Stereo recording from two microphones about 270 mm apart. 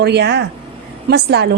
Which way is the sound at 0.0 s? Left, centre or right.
Right.